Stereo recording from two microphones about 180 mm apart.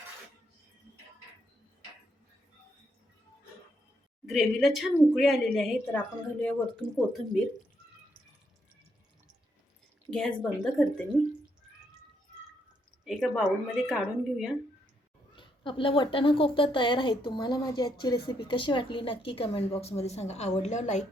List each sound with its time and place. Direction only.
4.3 s speech: centre (ahead or behind)
10.1 s speech: 5° left (ahead or behind)
13.1 s speech: centre (ahead or behind)
15.4 s speech: 30° left (ahead or behind)